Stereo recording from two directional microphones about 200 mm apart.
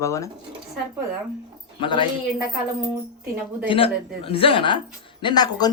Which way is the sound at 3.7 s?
25° left (ahead or behind).